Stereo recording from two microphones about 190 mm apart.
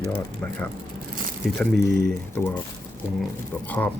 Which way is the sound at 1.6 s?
5° left (ahead or behind).